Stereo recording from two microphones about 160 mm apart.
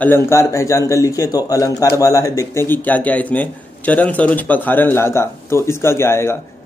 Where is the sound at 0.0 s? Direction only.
15° left (ahead or behind).